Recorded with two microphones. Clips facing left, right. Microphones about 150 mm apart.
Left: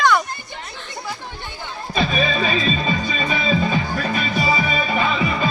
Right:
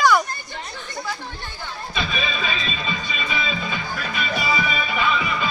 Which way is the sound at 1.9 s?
40° left (ahead or behind).